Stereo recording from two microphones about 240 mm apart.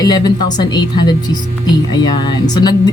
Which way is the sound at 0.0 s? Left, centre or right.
Centre.